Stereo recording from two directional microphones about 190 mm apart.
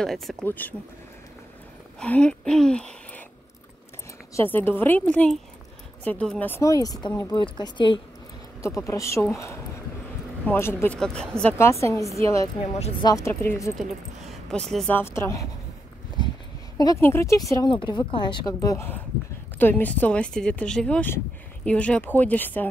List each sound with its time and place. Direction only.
0.0 s a woman's voice: centre (ahead or behind)
2.0 s a woman's voice: 5° left (ahead or behind)
4.4 s a woman's voice: 10° left (ahead or behind)
10.4 s a woman's voice: 10° left (ahead or behind)
13.7 s a woman's voice: centre (ahead or behind)
16.2 s dog: 20° left (ahead or behind)
16.7 s a woman's voice: 20° left (ahead or behind)